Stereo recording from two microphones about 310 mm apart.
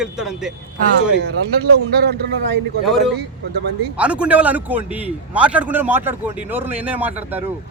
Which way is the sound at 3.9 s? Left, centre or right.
Centre.